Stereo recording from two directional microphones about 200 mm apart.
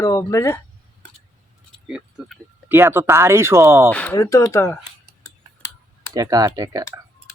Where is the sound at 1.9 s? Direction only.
5° right (ahead or behind).